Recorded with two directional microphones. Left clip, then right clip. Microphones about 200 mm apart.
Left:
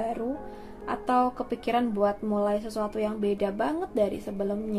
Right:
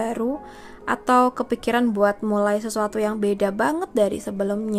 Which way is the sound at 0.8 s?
40° right (ahead or behind).